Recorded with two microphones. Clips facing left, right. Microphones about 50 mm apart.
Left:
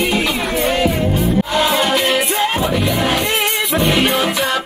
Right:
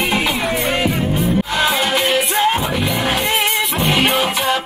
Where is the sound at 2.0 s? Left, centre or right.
Centre.